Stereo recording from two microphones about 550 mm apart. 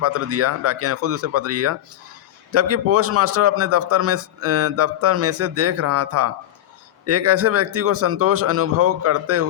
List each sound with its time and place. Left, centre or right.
0.0 s a man's voice: right